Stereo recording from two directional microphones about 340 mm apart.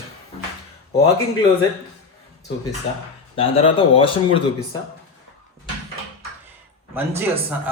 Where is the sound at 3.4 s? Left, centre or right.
Centre.